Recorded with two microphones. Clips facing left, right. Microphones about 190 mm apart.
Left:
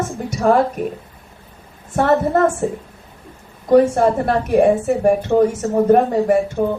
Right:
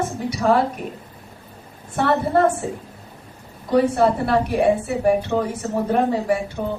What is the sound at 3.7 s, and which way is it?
A woman's voice, 45° left (ahead or behind).